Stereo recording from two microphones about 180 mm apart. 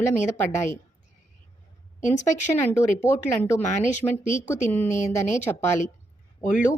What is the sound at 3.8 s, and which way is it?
Speech, 40° left (ahead or behind).